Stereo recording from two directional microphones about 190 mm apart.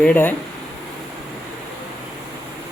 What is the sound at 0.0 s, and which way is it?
Speech, 10° left (ahead or behind).